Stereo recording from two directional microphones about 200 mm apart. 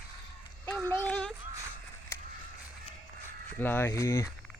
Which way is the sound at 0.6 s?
10° left (ahead or behind).